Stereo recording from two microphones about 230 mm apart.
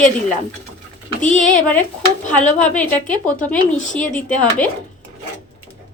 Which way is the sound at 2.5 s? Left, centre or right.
Centre.